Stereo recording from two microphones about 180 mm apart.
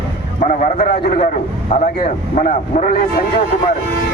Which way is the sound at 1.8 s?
40° left (ahead or behind).